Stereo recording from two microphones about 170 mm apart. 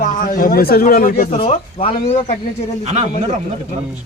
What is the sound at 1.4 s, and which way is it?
Speech, 30° left (ahead or behind).